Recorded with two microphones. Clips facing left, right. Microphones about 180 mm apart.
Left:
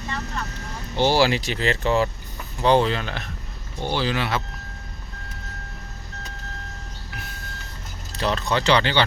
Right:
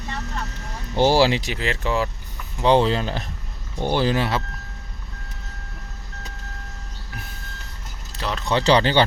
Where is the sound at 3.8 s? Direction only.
50° right (ahead or behind).